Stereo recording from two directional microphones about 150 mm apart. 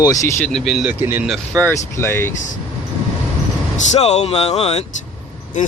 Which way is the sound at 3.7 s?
50° left (ahead or behind).